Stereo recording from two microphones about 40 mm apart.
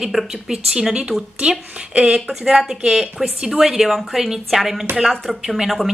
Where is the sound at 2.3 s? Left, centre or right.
Centre.